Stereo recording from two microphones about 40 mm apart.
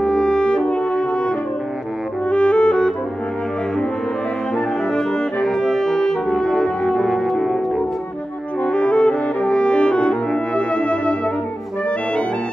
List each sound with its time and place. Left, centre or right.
0.0 s french horn: left
2.2 s music: left
4.6 s music: centre
5.6 s brass instrument: centre
7.1 s music: centre
8.6 s french horn: left
10.5 s music: left